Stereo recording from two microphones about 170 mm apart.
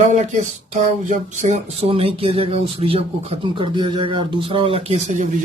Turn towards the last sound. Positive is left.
turn(degrees=-45)  # may be behind; listen again after turning